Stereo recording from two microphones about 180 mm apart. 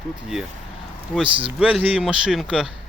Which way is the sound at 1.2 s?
30° right (ahead or behind).